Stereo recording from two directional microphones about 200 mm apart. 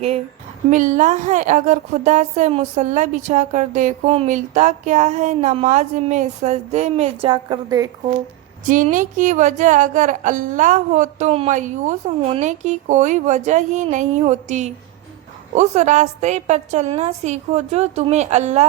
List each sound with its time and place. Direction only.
0.7 s a woman's voice: 40° right (ahead or behind); by 7.9 s 20° right (ahead or behind)
8.6 s a woman's voice: 40° right (ahead or behind)